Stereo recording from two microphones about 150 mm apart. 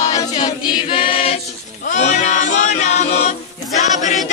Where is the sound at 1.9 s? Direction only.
55° left (ahead or behind).